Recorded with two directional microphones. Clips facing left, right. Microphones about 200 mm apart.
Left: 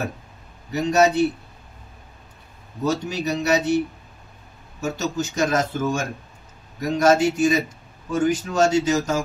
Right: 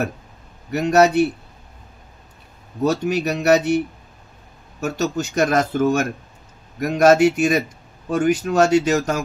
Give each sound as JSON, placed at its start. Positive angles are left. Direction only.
{"t": 0.7, "sound": "speech", "side_deg": -65}
{"t": 2.8, "sound": "speech", "side_deg": -65}